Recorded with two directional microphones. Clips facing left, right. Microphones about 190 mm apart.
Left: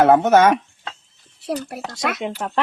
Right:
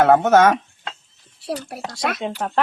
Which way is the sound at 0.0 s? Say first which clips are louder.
Even; 15° left (ahead or behind).